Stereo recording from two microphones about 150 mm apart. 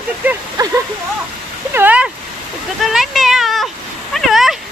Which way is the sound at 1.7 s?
10° right (ahead or behind).